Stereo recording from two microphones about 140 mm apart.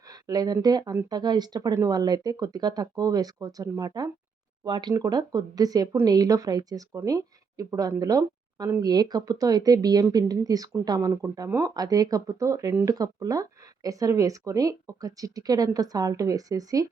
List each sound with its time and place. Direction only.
0.1 s speech: 25° right (ahead or behind)